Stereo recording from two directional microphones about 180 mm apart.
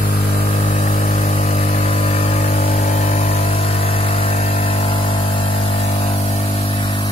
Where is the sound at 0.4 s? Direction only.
35° left (ahead or behind).